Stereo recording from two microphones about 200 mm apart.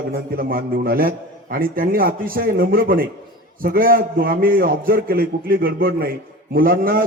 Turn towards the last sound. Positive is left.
turn(degrees=-45)  # may be behind; listen again after turning